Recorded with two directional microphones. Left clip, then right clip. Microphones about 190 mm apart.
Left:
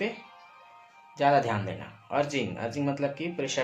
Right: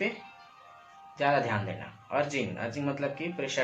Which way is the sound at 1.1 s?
40° left (ahead or behind).